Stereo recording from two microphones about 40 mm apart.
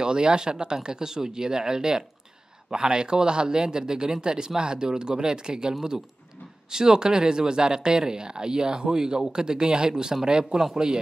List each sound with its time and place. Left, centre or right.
0.0 s speech: right